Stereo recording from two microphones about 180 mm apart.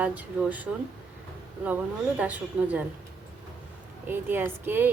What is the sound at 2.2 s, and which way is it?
Speech, 10° right (ahead or behind).